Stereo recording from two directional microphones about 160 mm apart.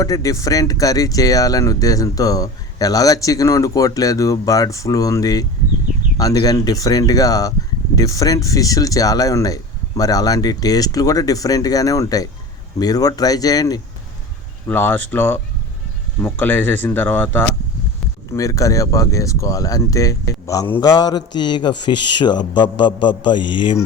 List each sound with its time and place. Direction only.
0.0 s speech: 20° left (ahead or behind)
14.7 s speech: 15° left (ahead or behind); by 23.7 s 30° left (ahead or behind)